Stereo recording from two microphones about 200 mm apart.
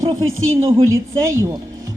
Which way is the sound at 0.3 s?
90° right.